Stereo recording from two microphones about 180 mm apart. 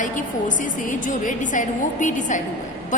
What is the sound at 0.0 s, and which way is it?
A woman's voice, 45° left (ahead or behind).